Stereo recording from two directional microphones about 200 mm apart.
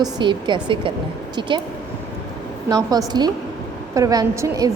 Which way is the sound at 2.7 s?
20° right (ahead or behind).